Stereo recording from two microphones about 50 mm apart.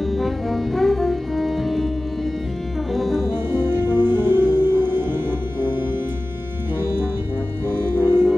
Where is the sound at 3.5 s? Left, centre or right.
Right.